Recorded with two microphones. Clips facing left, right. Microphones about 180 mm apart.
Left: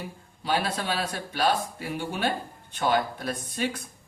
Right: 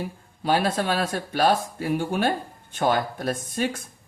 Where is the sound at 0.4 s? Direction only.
50° right (ahead or behind).